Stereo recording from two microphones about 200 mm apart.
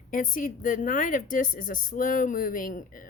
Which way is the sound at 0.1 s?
45° left (ahead or behind).